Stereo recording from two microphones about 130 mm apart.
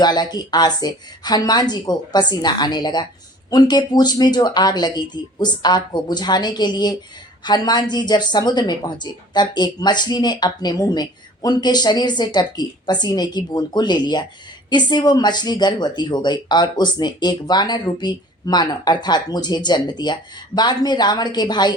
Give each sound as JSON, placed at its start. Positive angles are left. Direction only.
{"t": 0.0, "sound": "a woman's voice", "side_deg": 35}